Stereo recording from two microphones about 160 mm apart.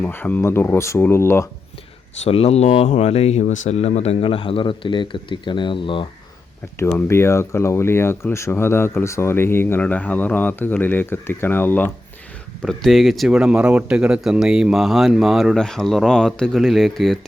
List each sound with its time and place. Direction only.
0.0 s speech: 10° left (ahead or behind)
2.2 s speech: 40° left (ahead or behind)
6.7 s speech: 15° left (ahead or behind)
12.6 s speech: centre (ahead or behind)